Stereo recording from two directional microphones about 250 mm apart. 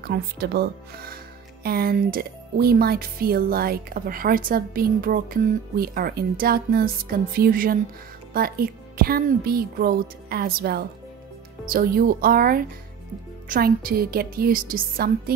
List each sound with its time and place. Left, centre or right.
0.0 s speech: right